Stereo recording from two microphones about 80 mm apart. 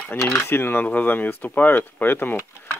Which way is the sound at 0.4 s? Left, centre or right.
Left.